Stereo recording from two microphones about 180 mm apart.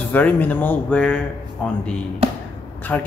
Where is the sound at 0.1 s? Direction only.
10° left (ahead or behind).